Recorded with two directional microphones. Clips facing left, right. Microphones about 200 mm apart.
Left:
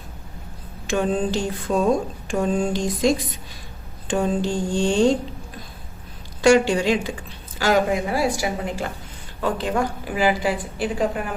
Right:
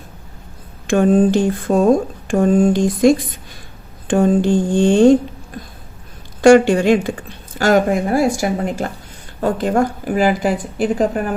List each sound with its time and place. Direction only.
0.9 s speech: 50° right (ahead or behind)
6.4 s speech: 50° right (ahead or behind)